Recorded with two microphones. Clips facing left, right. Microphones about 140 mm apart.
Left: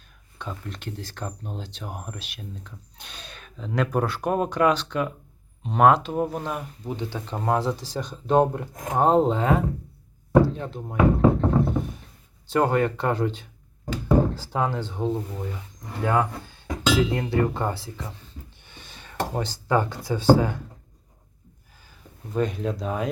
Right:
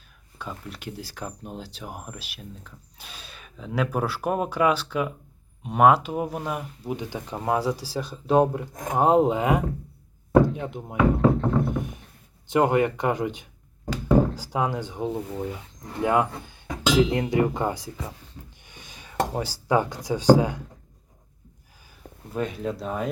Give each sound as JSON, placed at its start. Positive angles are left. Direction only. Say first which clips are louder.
{"t": 0.3, "sound": "speech", "louder": "left 1 dB", "side_deg": -5}
{"t": 11.2, "sound": "music", "louder": "left 1 dB", "side_deg": 20}
{"t": 12.5, "sound": "speech", "louder": "right 1 dB", "side_deg": -15}
{"t": 18.6, "sound": "a sound", "louder": "even", "side_deg": -15}
{"t": 22.0, "sound": "a sound", "louder": "right 5 dB", "side_deg": -55}
{"t": 22.4, "sound": "speech", "louder": "left 3 dB", "side_deg": 0}